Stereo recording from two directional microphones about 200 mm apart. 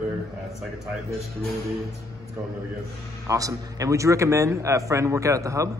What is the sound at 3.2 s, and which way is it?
A man's voice, 15° right (ahead or behind).